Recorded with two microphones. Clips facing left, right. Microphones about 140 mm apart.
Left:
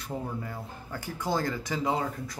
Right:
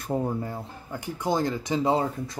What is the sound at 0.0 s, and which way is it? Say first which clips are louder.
Speech: right 7 dB; 40° right (ahead or behind).